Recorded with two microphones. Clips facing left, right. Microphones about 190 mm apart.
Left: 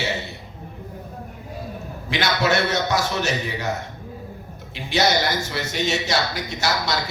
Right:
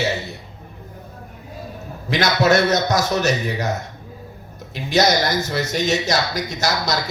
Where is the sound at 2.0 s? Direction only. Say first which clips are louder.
Right 4 dB; 40° right (ahead or behind).